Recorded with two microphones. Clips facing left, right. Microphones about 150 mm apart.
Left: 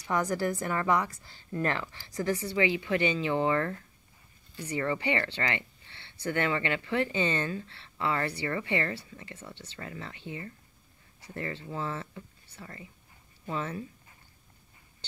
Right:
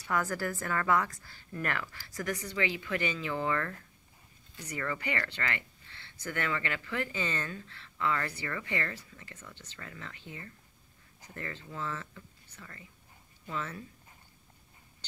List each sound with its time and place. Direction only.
0.0 s a woman's voice: 20° left (ahead or behind); by 10.1 s 35° left (ahead or behind)
11.3 s speech: 35° left (ahead or behind)